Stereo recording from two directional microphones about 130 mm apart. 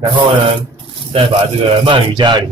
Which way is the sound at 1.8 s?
35° right (ahead or behind).